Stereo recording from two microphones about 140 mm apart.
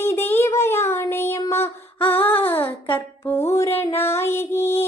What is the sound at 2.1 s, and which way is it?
Music, 15° left (ahead or behind).